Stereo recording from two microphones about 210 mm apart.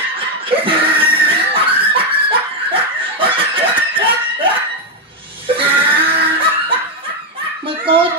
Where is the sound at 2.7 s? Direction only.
25° right (ahead or behind).